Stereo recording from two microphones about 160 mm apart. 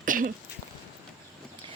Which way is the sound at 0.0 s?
55° right (ahead or behind).